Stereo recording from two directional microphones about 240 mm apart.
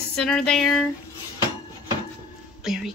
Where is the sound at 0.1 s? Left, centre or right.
Centre.